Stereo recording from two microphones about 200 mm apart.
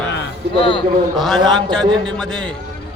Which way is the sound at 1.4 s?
5° left (ahead or behind).